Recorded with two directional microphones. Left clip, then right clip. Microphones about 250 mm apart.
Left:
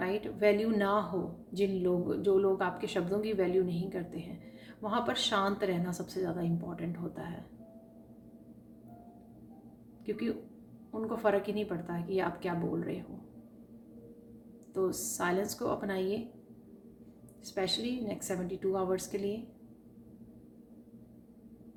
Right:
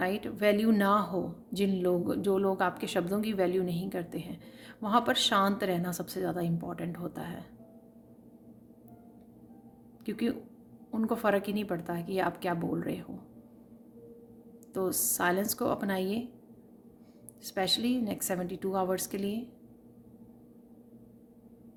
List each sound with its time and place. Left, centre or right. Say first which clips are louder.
0.0 s speech: right 1 dB; right
10.1 s speech: right 2 dB; right
14.7 s speech: right 1 dB; right
17.4 s speech: right 4 dB; right